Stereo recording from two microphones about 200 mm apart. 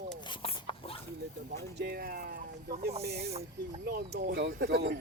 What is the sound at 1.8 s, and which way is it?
Speech, 50° right (ahead or behind).